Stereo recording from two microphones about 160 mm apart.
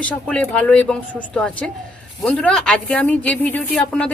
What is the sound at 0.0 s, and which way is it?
A woman's voice, 5° left (ahead or behind).